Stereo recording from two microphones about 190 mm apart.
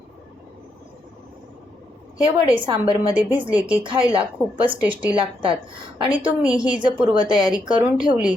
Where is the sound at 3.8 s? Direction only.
25° right (ahead or behind).